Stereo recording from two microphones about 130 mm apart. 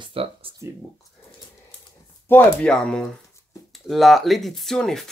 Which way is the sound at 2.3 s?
5° left (ahead or behind).